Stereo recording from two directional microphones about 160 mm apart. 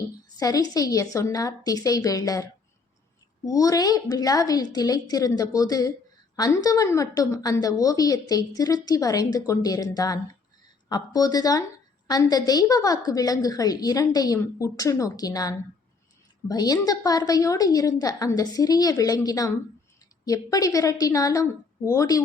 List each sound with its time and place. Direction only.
0.3 s a woman's voice: 25° left (ahead or behind)